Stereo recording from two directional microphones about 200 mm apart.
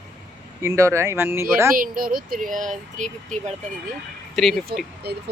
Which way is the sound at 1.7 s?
45° right (ahead or behind).